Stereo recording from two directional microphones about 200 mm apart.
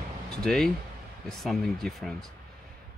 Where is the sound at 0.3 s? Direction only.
Centre (ahead or behind).